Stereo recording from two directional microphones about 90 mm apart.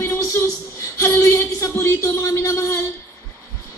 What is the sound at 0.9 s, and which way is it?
Speech, 30° left (ahead or behind).